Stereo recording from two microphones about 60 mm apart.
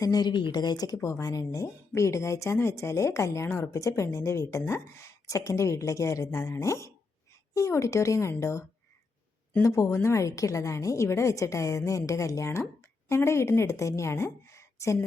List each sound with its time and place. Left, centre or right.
0.8 s speech: left
1.2 s speech: left
2.0 s speech: left
9.6 s a woman's voice: left